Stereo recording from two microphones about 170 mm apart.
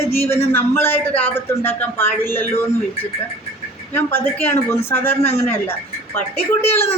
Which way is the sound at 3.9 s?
10° left (ahead or behind).